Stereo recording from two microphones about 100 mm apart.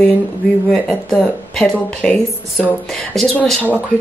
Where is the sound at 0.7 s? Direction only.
5° left (ahead or behind).